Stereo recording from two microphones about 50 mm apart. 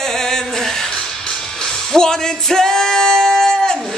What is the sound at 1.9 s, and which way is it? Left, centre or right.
Singing, centre.